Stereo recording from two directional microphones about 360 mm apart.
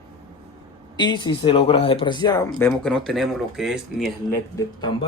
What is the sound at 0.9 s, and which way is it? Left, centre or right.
Speech, centre.